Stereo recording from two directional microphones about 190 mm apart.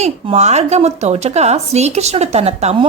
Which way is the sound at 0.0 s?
35° right (ahead or behind).